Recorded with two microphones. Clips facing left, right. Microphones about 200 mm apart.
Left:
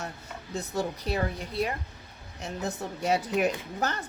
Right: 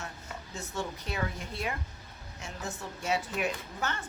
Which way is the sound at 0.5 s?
35° left (ahead or behind).